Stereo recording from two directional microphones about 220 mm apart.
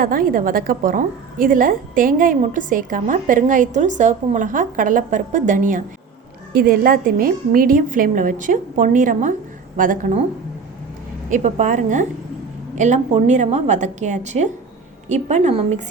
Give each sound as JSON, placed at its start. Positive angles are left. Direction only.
{"t": 0.0, "sound": "a woman's voice", "side_deg": -40}
{"t": 11.3, "sound": "a woman's voice", "side_deg": -35}